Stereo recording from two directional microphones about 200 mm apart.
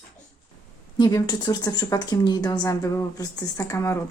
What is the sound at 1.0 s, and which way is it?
A woman's voice, 20° left (ahead or behind).